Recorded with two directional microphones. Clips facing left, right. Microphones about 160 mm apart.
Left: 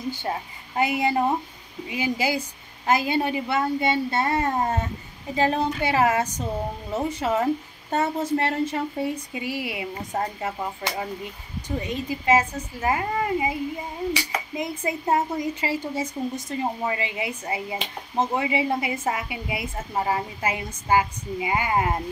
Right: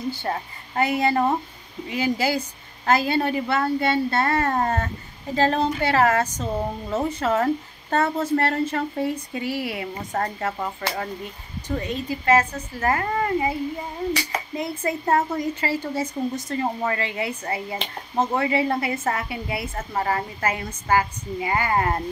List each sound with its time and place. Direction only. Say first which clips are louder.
0.7 s speech: right 1 dB; 15° left (ahead or behind)
12.3 s speech: right 1 dB; 15° left (ahead or behind)